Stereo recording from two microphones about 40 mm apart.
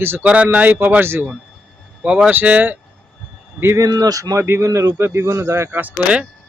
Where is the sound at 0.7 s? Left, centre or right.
Right.